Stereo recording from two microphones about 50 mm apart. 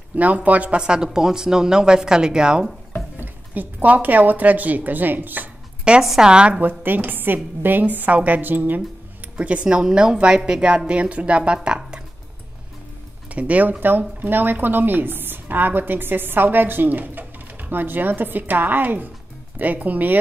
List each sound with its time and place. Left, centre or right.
0.1 s speech: right; by 2.7 s centre
3.5 s speech: right
5.9 s a woman's voice: centre
6.6 s speech: right
9.4 s speech: right
9.8 s speech: centre
13.3 s speech: right